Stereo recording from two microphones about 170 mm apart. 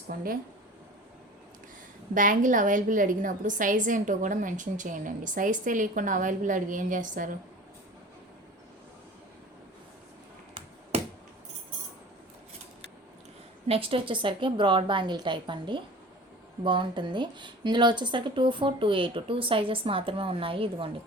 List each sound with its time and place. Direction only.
0.1 s speech: 60° right (ahead or behind)
2.1 s a woman's voice: 50° right (ahead or behind)
10.9 s a sound: 35° right (ahead or behind)
13.7 s a woman's voice: 35° right (ahead or behind)